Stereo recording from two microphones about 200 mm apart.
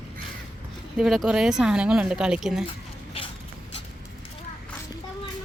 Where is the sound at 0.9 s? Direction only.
Centre (ahead or behind).